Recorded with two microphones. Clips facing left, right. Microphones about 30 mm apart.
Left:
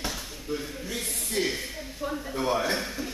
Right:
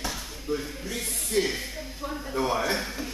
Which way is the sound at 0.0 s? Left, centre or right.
Centre.